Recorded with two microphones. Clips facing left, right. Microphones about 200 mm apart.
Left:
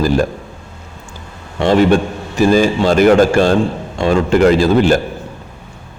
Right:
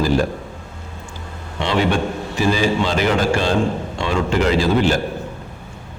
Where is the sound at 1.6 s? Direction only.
45° left (ahead or behind).